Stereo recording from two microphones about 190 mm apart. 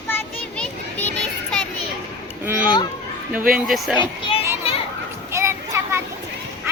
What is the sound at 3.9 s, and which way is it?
Speech, 25° left (ahead or behind).